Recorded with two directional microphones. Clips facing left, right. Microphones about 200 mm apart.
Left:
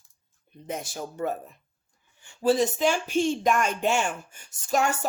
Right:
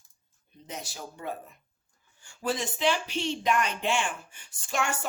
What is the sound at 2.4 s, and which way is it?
Speech, 35° left (ahead or behind).